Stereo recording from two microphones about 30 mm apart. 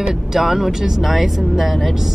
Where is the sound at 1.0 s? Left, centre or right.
Centre.